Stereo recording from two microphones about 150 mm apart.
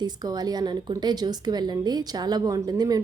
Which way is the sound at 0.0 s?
25° right (ahead or behind).